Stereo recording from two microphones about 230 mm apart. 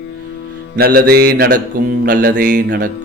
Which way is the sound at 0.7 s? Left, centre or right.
Right.